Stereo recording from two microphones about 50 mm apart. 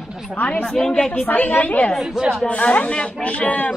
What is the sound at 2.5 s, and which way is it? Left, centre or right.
Speech, left.